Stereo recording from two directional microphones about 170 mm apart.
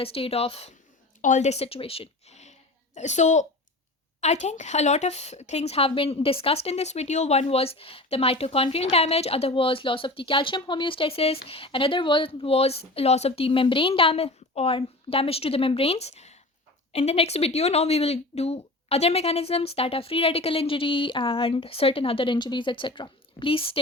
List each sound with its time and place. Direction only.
0.0 s speech: 35° left (ahead or behind)